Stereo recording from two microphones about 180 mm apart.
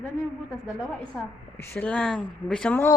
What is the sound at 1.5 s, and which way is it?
Speech, 15° left (ahead or behind).